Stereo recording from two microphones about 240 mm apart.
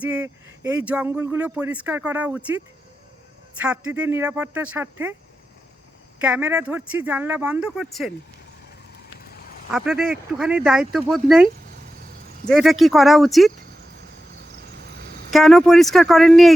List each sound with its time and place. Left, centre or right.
0.0 s speech: centre
3.9 s speech: centre
6.1 s speech: centre
9.1 s duck: left
9.7 s speech: centre
12.5 s speech: centre
14.6 s vehicle: right
15.3 s speech: centre